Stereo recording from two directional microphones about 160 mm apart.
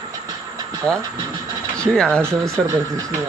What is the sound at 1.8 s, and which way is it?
Speech, 5° left (ahead or behind).